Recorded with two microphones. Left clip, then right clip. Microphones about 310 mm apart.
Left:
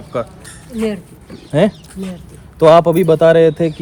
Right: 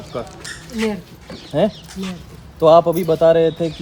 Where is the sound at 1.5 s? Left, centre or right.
Left.